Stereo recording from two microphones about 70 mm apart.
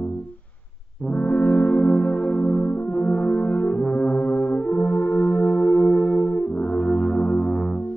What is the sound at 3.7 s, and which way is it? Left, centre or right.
Brass instrument, centre.